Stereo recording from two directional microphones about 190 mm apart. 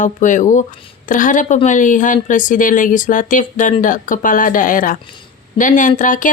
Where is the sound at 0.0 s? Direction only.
40° left (ahead or behind).